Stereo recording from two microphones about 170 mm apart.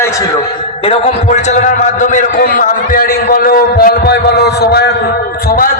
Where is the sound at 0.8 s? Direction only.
40° left (ahead or behind); by 4.9 s 70° left (ahead or behind).